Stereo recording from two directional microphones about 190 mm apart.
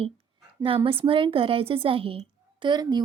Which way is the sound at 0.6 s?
30° right (ahead or behind).